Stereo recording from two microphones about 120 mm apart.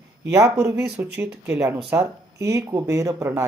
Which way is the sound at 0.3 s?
25° right (ahead or behind).